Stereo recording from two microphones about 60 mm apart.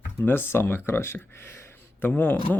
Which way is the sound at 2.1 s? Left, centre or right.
Left.